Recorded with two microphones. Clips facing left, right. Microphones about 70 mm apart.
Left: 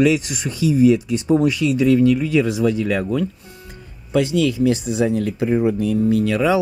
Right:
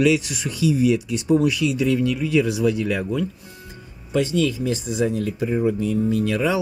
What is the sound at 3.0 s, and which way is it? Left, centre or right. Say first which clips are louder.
Speech: left 3 dB; left.